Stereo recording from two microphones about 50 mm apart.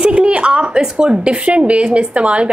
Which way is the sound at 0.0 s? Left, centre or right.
Right.